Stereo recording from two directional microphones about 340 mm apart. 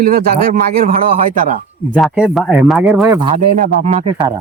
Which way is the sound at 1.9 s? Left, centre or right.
Centre.